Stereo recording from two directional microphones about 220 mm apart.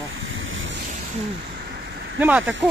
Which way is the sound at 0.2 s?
60° right (ahead or behind).